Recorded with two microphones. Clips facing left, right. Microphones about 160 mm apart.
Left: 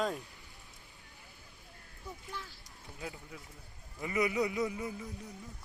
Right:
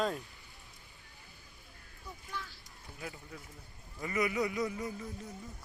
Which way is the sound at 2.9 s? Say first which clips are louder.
Left 1 dB; 20° left (ahead or behind).